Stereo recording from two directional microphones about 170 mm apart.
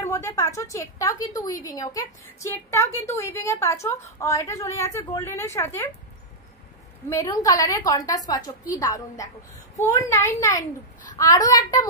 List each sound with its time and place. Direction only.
0.0 s a woman's voice: 15° left (ahead or behind)
7.1 s a woman's voice: 20° left (ahead or behind)